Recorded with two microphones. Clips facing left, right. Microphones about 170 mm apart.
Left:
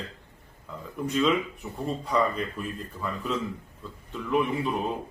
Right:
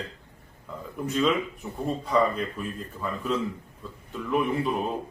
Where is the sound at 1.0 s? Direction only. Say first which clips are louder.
Even; centre (ahead or behind).